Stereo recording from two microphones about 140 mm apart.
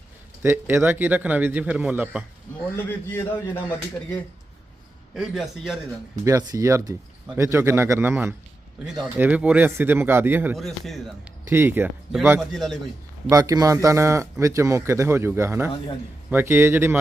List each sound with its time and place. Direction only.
0.4 s a man's voice: 15° right (ahead or behind)
2.7 s speech: 15° left (ahead or behind)
5.1 s a man's voice: 5° right (ahead or behind)
6.2 s speech: 25° right (ahead or behind)
8.9 s a man's voice: 5° right (ahead or behind)
10.6 s a man's voice: centre (ahead or behind)
11.4 s a man's voice: 15° right (ahead or behind)
12.4 s a man's voice: centre (ahead or behind)
13.3 s a man's voice: 25° right (ahead or behind)